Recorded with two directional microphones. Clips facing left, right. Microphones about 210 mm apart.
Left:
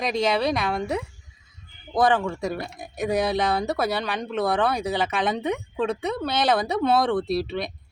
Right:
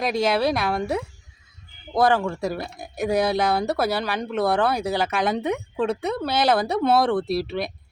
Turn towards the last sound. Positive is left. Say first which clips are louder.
# right 1 dB
turn(degrees=-5)  # may be behind; listen again after turning